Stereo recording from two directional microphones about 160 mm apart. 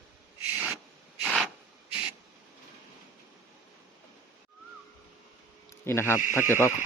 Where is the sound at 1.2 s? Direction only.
Centre (ahead or behind).